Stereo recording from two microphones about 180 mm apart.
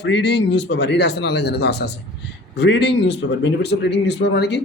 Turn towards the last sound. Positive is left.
turn(degrees=70)  # may be behind; listen again after turning